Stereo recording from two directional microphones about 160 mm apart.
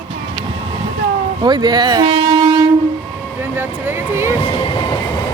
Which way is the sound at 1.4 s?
25° right (ahead or behind).